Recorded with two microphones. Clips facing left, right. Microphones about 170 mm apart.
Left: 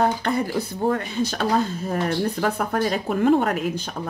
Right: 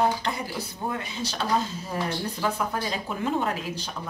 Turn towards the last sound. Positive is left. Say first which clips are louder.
# left 6 dB
turn(degrees=55)  # may be behind; listen again after turning